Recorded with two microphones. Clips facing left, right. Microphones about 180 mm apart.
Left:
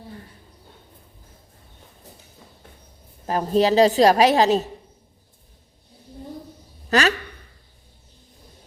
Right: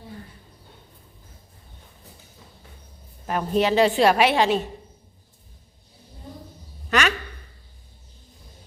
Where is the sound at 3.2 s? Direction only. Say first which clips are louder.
Left 3 dB; 35° left (ahead or behind).